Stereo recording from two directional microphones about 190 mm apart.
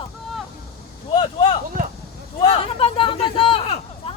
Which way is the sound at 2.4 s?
30° left (ahead or behind).